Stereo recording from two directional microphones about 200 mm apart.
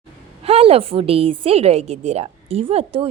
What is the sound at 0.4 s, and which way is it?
A woman's voice, 30° right (ahead or behind).